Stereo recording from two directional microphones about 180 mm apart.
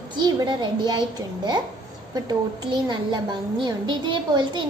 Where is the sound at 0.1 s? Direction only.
25° right (ahead or behind).